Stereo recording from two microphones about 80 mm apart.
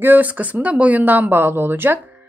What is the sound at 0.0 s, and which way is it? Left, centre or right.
A woman's voice, right.